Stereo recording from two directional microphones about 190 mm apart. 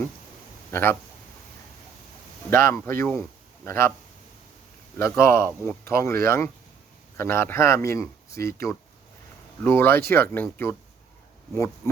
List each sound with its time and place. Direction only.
0.7 s speech: 10° left (ahead or behind)
2.5 s speech: 10° left (ahead or behind)
4.9 s speech: 15° left (ahead or behind)
9.6 s speech: 10° left (ahead or behind)